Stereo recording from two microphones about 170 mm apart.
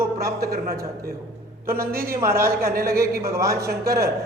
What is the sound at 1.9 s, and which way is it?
A man's voice, 60° right (ahead or behind).